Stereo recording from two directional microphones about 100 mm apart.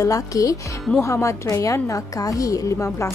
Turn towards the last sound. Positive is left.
turn(degrees=30)  # may be behind; listen again after turning